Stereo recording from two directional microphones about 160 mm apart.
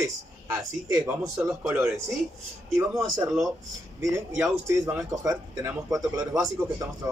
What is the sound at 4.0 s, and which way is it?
A man's voice, 15° right (ahead or behind).